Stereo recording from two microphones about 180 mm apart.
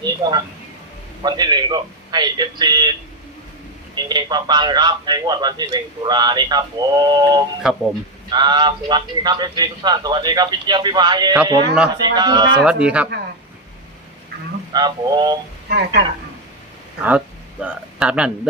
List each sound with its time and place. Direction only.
0.0 s a man's voice: 25° right (ahead or behind)
3.9 s a man's voice: 25° right (ahead or behind)
7.6 s speech: 5° right (ahead or behind)
8.3 s a man's voice: 25° right (ahead or behind)
12.6 s speech: 5° right (ahead or behind)
14.7 s a man's voice: 25° right (ahead or behind)
17.1 s speech: 10° right (ahead or behind)